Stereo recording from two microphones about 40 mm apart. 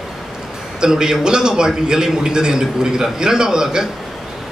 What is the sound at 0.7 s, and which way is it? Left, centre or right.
A man's voice, centre.